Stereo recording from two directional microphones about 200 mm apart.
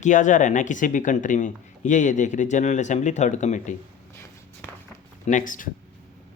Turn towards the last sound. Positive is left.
turn(degrees=40)  # may be behind; listen again after turning